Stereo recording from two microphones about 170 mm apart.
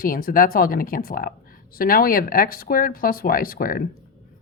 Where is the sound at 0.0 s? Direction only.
60° left (ahead or behind).